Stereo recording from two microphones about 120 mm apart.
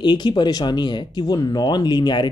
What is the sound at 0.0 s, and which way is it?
Speech, 40° left (ahead or behind).